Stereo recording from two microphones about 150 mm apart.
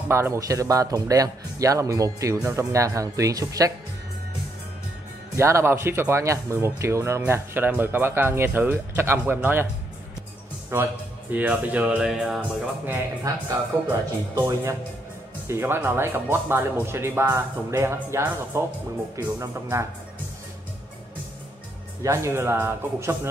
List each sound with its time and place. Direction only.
0.1 s speech: 20° right (ahead or behind)
5.3 s speech: 20° right (ahead or behind)
10.7 s speech: 20° right (ahead or behind); by 12.4 s centre (ahead or behind)
12.8 s speech: 15° right (ahead or behind)
22.0 s speech: 20° right (ahead or behind)